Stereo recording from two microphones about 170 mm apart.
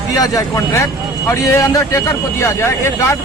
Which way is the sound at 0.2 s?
15° left (ahead or behind).